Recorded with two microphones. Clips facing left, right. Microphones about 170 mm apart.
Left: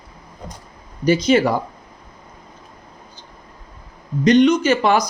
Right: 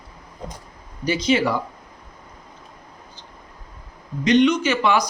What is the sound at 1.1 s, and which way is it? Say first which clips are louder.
Speech: left 5 dB; 45° left (ahead or behind).